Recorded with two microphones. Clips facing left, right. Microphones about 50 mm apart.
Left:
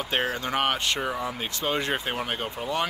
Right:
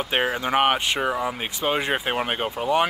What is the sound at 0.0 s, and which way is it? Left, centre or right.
Speech, right.